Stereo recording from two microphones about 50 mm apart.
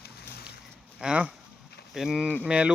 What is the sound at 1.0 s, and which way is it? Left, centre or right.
Speech, centre.